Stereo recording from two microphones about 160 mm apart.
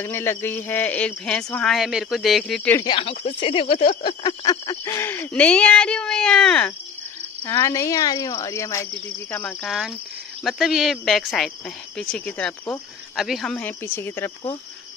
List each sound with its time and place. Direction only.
0.0 s speech: 15° left (ahead or behind)
2.8 s speech: 30° left (ahead or behind)
4.5 s speech: 20° left (ahead or behind)
7.4 s speech: 20° left (ahead or behind)
9.3 s speech: 10° left (ahead or behind)
9.7 s speech: centre (ahead or behind); by 14.3 s 15° left (ahead or behind)